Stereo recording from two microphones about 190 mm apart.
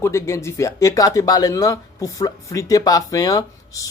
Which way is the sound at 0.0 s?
15° left (ahead or behind).